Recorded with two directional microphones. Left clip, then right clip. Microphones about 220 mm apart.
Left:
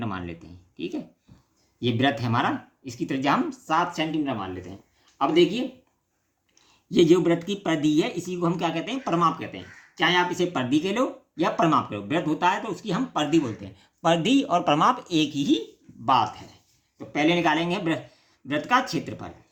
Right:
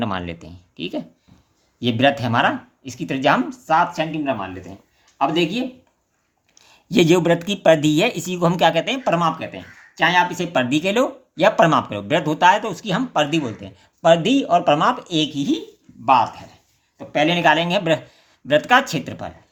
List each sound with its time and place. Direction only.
0.0 s speech: 40° right (ahead or behind)
6.9 s speech: 40° right (ahead or behind); by 13.7 s 20° right (ahead or behind)
13.7 s speech: 10° right (ahead or behind)
16.0 s speech: 15° right (ahead or behind)
17.1 s speech: 30° right (ahead or behind)